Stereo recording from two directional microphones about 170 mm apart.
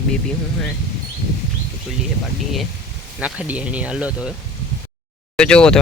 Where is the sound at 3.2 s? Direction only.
5° right (ahead or behind).